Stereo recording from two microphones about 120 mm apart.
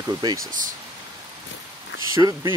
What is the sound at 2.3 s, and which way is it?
Speech, 30° right (ahead or behind).